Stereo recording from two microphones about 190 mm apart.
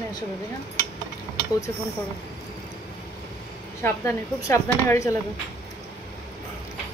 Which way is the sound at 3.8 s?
15° left (ahead or behind).